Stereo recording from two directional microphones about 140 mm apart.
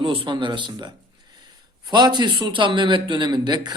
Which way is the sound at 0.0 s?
40° right (ahead or behind).